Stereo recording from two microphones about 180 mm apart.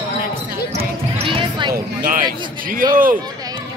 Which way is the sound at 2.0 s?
50° right (ahead or behind).